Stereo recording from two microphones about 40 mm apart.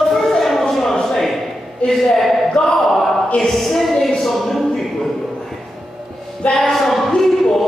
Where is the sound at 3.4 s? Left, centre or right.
Centre.